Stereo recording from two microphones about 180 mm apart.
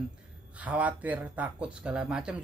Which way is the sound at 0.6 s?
10° right (ahead or behind).